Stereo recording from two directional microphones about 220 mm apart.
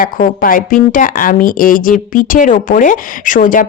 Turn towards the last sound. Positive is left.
turn(degrees=35)  # may be behind; listen again after turning